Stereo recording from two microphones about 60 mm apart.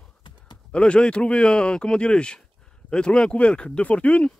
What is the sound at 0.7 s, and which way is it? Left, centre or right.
Speech, centre.